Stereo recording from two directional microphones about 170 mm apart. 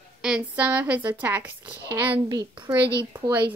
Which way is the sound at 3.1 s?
10° right (ahead or behind).